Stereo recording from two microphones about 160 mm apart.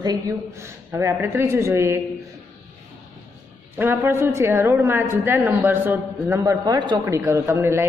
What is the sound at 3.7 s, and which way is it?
A woman's voice, 15° right (ahead or behind).